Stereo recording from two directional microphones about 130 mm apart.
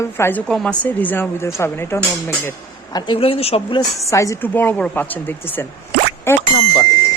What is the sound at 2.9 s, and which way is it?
Speech, 40° left (ahead or behind).